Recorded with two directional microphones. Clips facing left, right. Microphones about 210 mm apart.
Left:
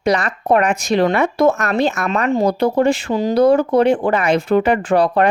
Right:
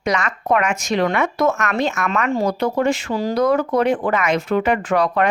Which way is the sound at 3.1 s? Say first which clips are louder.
Left 5 dB; 20° left (ahead or behind).